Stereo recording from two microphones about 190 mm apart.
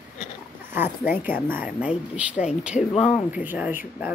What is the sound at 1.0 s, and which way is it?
Speech, 45° left (ahead or behind).